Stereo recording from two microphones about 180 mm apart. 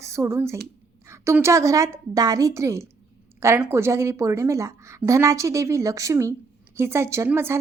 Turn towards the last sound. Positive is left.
turn(degrees=-15)  # may be behind; listen again after turning